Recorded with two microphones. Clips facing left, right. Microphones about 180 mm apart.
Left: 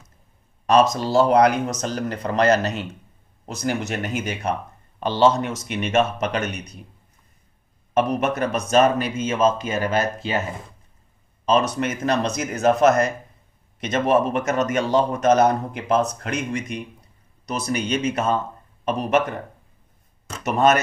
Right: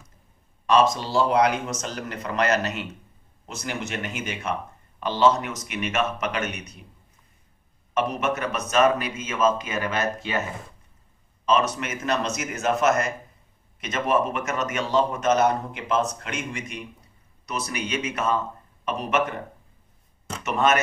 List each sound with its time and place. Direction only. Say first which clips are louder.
0.7 s a man's voice: left 3 dB; 40° left (ahead or behind)
7.9 s a man's voice: left 4 dB; 40° left (ahead or behind)
11.4 s a man's voice: left 3 dB; 35° left (ahead or behind)
20.4 s a man's voice: left 4 dB; 35° left (ahead or behind)